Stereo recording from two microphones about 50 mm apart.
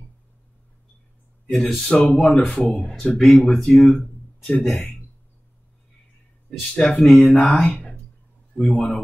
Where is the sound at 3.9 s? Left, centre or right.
Centre.